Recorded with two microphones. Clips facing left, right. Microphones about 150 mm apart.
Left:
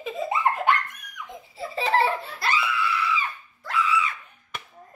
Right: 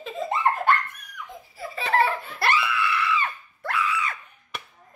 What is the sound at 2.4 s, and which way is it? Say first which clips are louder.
Screaming: right 2 dB; 65° right (ahead or behind).